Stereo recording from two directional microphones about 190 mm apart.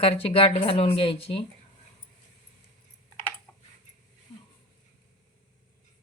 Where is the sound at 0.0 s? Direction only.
30° left (ahead or behind).